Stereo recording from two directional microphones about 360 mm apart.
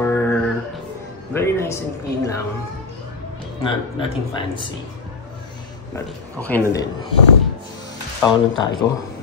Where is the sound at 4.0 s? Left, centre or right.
Centre.